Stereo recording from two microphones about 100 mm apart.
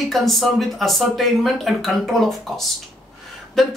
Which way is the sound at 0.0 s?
Centre (ahead or behind).